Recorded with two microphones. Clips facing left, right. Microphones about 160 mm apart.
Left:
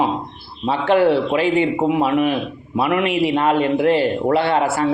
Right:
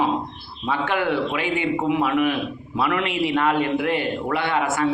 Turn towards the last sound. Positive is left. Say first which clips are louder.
# left 4 dB
turn(degrees=30)  # may be behind; listen again after turning